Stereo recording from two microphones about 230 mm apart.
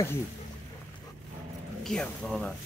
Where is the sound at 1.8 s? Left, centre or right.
Centre.